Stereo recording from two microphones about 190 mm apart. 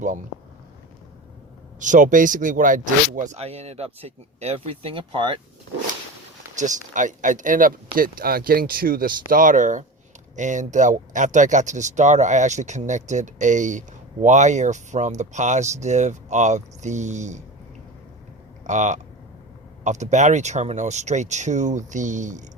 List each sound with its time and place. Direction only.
1.8 s speech: 40° right (ahead or behind); by 5.4 s 25° right (ahead or behind)
6.6 s speech: 40° right (ahead or behind)
18.6 s speech: 40° right (ahead or behind)